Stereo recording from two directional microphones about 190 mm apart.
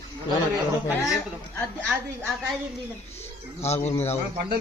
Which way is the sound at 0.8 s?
Centre (ahead or behind).